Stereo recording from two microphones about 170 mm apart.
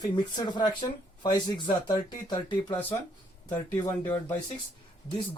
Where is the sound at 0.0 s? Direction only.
25° left (ahead or behind).